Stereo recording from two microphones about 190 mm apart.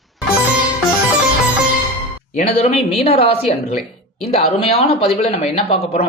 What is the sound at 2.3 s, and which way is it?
Speech, 30° left (ahead or behind).